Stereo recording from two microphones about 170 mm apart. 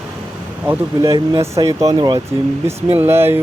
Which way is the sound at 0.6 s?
10° right (ahead or behind).